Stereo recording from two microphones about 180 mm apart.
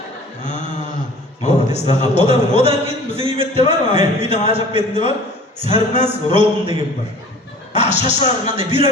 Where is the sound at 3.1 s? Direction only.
30° right (ahead or behind).